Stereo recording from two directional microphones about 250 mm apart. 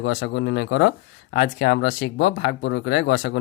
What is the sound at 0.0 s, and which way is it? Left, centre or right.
Speech, left.